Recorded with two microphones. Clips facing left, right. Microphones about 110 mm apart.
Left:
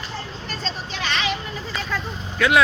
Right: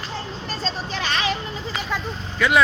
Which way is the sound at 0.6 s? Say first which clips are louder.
Right 2 dB; 40° right (ahead or behind).